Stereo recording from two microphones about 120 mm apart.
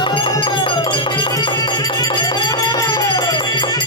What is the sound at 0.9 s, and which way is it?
Music, 45° left (ahead or behind).